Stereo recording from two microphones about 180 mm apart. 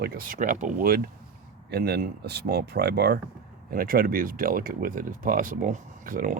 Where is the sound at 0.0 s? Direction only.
55° right (ahead or behind).